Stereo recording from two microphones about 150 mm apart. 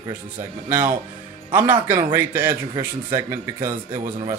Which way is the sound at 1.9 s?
15° right (ahead or behind).